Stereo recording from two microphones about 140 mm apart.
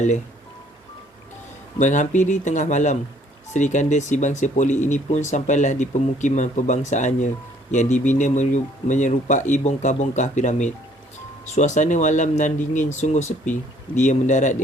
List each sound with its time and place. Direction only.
1.8 s speech: 60° left (ahead or behind)